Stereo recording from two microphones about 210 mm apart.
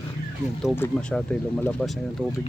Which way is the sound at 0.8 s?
5° left (ahead or behind).